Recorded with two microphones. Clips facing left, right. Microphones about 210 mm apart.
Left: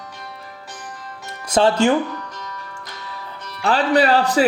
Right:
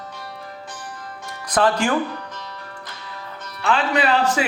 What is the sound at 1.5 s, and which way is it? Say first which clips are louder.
Speech: left 4 dB; 25° left (ahead or behind).